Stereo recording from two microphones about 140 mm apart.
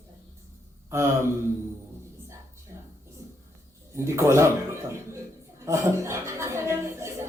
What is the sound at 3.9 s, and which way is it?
A man's voice, 20° right (ahead or behind).